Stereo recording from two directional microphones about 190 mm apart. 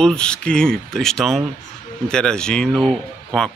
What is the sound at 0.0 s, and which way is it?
Speech, 5° left (ahead or behind).